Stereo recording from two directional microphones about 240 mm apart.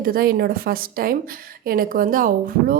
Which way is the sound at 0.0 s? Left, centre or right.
Right.